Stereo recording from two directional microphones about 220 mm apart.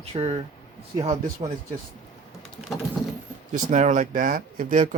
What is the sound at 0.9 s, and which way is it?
Speech, 15° right (ahead or behind).